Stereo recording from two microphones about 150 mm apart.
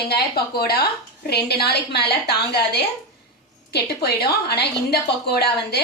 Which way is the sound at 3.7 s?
90° left.